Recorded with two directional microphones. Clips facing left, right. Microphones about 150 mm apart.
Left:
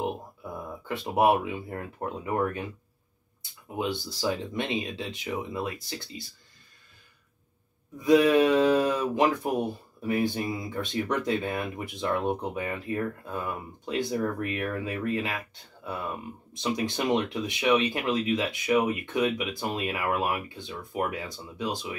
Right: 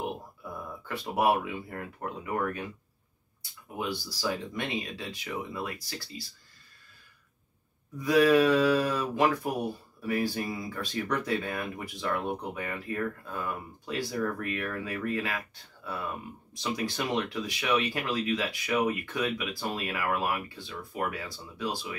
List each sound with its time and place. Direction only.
0.0 s speech: 20° left (ahead or behind)
3.7 s speech: 20° left (ahead or behind)
8.0 s speech: 20° left (ahead or behind)
16.5 s speech: 20° left (ahead or behind)